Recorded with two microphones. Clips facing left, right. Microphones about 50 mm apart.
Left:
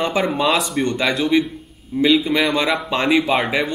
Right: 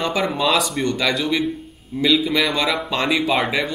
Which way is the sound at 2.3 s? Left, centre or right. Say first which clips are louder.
Left 2 dB; centre.